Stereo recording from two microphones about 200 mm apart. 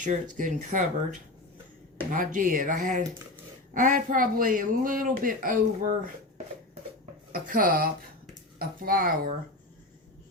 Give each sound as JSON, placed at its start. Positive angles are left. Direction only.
{"t": 0.0, "sound": "speech", "side_deg": -40}
{"t": 2.0, "sound": "speech", "side_deg": -40}
{"t": 7.3, "sound": "speech", "side_deg": -45}